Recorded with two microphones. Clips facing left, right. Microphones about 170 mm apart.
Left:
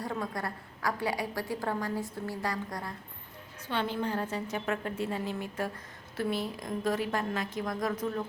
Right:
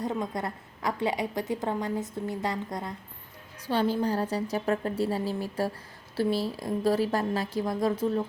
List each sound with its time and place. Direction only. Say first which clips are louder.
0.0 s a woman's voice: right 4 dB; 20° right (ahead or behind)
3.7 s a woman's voice: right 6 dB; 35° right (ahead or behind)